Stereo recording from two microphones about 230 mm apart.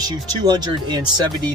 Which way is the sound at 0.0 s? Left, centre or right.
Centre.